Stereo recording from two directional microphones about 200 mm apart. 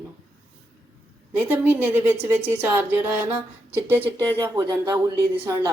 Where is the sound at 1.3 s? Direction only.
10° right (ahead or behind).